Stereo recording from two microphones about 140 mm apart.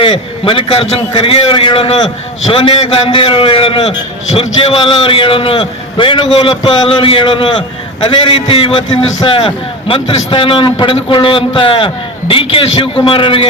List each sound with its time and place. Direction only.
0.0 s a man's voice: 40° left (ahead or behind)